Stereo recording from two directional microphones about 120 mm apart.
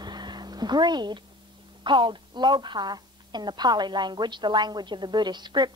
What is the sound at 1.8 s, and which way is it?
A woman's voice, 40° right (ahead or behind).